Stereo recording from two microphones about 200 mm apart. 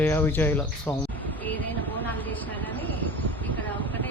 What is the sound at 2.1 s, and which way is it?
Speech, 10° left (ahead or behind).